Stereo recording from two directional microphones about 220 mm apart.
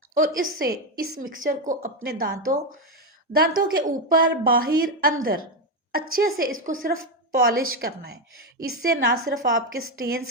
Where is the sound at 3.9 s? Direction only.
40° right (ahead or behind).